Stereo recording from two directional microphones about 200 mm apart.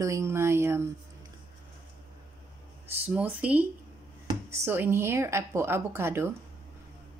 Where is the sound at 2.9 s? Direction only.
5° right (ahead or behind).